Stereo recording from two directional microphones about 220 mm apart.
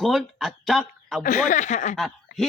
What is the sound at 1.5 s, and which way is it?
Speech, 35° left (ahead or behind).